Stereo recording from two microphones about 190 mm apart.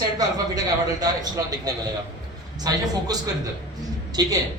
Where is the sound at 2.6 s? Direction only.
20° right (ahead or behind).